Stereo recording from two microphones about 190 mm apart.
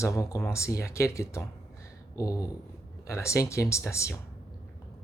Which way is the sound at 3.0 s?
15° left (ahead or behind).